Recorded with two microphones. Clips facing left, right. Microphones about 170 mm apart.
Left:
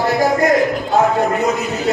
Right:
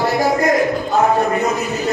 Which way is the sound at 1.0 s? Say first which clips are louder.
Even; 20° left (ahead or behind).